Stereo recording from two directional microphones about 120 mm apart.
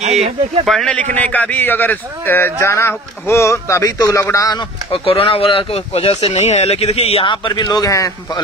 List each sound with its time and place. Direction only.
0.7 s a man's voice: 5° left (ahead or behind); by 4.6 s 30° left (ahead or behind)
4.9 s speech: 50° left (ahead or behind)
7.4 s a man's voice: 40° left (ahead or behind)